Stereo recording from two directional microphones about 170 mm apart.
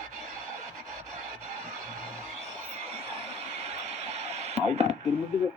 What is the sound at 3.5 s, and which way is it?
Radio, 40° right (ahead or behind).